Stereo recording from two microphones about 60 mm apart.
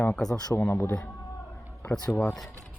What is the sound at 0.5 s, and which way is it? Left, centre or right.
Speech, left.